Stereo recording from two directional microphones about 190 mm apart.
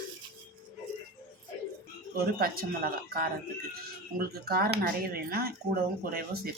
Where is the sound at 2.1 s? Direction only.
50° right (ahead or behind).